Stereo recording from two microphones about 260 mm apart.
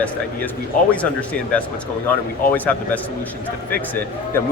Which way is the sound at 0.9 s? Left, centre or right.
Centre.